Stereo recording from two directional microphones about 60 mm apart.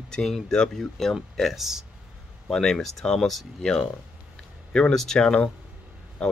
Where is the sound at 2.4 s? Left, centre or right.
Centre.